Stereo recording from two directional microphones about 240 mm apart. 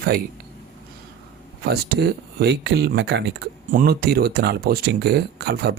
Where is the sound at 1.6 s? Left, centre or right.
Right.